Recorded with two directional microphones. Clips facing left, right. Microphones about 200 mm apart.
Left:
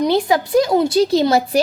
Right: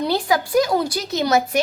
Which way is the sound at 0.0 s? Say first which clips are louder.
Left 4 dB; 25° left (ahead or behind).